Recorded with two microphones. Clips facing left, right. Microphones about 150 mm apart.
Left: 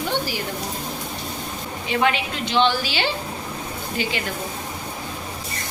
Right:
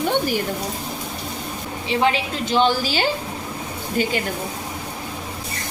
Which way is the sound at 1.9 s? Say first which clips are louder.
Right 2 dB; 30° right (ahead or behind).